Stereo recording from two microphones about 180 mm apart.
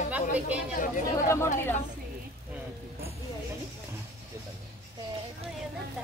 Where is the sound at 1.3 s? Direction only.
15° left (ahead or behind).